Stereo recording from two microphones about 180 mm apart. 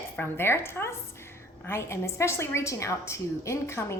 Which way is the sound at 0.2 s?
15° left (ahead or behind).